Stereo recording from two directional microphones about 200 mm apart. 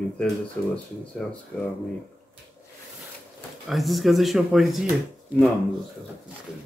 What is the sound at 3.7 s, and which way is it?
Speech, centre (ahead or behind).